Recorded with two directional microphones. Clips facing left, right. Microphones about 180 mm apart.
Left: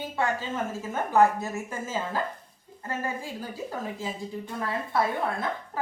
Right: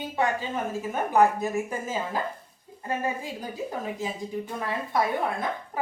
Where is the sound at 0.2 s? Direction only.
15° right (ahead or behind).